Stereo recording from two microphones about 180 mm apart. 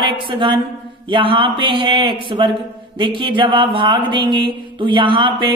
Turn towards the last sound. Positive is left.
turn(degrees=-25)  # may be behind; listen again after turning